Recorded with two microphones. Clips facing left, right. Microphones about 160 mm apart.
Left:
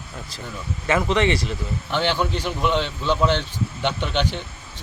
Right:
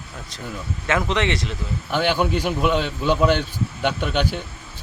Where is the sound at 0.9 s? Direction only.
Centre (ahead or behind).